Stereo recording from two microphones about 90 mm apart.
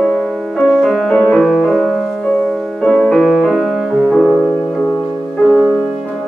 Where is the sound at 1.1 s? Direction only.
10° left (ahead or behind).